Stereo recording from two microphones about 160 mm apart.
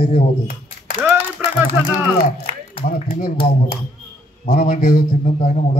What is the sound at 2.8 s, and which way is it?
Speech, 55° left (ahead or behind).